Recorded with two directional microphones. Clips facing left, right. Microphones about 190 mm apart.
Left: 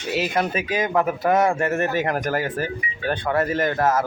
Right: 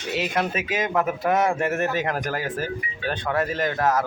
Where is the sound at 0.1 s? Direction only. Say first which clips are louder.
Left 2 dB; centre (ahead or behind).